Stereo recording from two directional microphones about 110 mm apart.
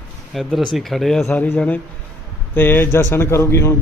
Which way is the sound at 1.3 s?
15° left (ahead or behind).